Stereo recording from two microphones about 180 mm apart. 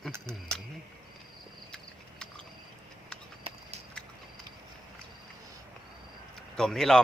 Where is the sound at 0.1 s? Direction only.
15° right (ahead or behind).